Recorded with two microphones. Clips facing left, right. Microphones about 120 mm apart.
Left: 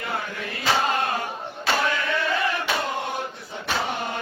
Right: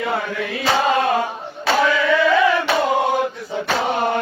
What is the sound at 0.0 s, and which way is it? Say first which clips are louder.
Chant: right 8 dB; 90° right.